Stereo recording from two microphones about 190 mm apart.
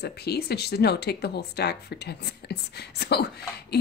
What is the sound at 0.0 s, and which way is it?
Speech, 55° left (ahead or behind).